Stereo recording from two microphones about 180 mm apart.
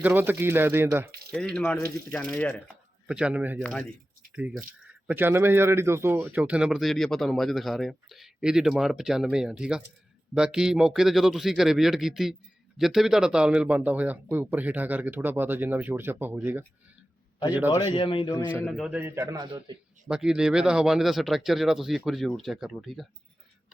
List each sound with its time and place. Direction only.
0.0 s speech: 10° right (ahead or behind)
1.3 s a man's voice: 5° left (ahead or behind)
3.1 s speech: 5° right (ahead or behind)
3.6 s a man's voice: 5° left (ahead or behind)
4.4 s a man's voice: 5° right (ahead or behind)
17.7 s speech: 25° left (ahead or behind)
18.6 s a man's voice: centre (ahead or behind)
18.9 s speech: 15° right (ahead or behind)
20.1 s a man's voice: 5° right (ahead or behind)